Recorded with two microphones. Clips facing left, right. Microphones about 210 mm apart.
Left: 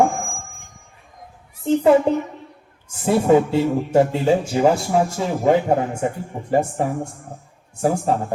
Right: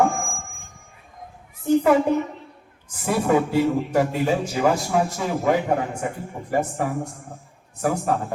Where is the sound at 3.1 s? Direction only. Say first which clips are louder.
Left 5 dB; 25° left (ahead or behind).